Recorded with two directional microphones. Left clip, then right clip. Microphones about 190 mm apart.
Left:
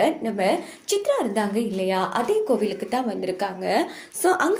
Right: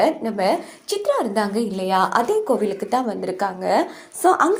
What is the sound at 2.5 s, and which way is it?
A woman's voice, 15° right (ahead or behind).